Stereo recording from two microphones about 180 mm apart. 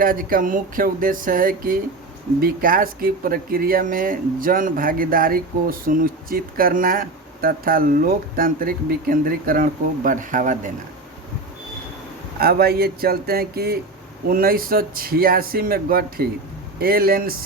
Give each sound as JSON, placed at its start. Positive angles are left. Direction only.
{"t": 0.0, "sound": "speech", "side_deg": -50}
{"t": 12.4, "sound": "speech", "side_deg": -55}